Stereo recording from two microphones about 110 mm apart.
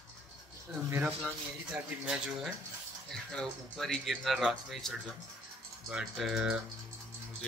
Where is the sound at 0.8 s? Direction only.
20° right (ahead or behind).